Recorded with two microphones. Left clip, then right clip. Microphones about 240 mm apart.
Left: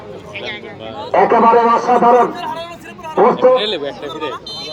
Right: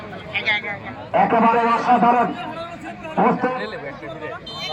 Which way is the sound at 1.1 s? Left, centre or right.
Left.